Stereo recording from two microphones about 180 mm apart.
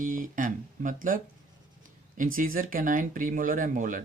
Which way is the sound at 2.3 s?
50° right (ahead or behind).